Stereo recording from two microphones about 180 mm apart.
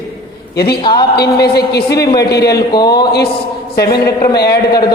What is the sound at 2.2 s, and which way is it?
Speech, 65° left (ahead or behind).